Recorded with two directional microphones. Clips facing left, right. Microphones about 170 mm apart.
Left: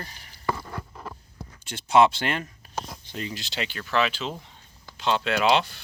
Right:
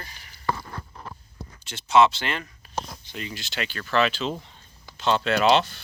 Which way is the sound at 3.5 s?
20° left (ahead or behind).